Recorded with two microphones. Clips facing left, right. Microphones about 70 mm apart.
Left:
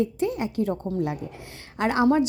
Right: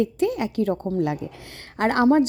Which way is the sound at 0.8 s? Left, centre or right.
Right.